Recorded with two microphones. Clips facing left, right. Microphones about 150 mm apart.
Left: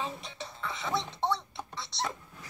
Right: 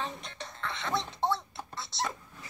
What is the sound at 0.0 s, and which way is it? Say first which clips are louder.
Music: left 1 dB; 5° left (ahead or behind).